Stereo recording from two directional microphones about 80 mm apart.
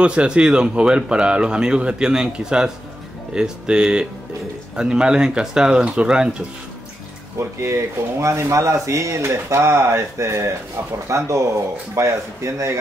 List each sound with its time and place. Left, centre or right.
0.0 s speech: centre
7.3 s speech: right